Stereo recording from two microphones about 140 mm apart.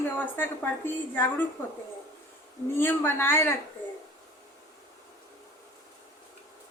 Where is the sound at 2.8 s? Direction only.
15° left (ahead or behind).